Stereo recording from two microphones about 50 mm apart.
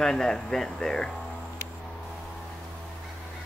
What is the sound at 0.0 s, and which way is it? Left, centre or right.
Speech, centre.